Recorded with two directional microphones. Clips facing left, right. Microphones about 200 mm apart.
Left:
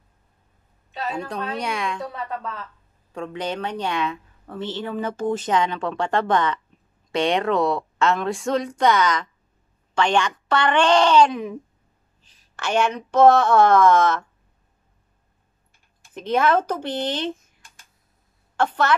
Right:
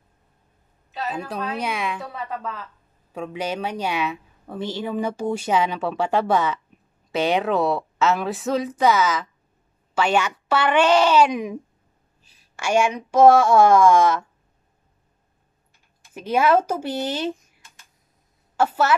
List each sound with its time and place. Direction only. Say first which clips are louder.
0.9 s a woman's voice: even; 5° right (ahead or behind)
16.1 s speech: right 1 dB; 10° right (ahead or behind)
18.6 s speech: right 1 dB; 5° right (ahead or behind)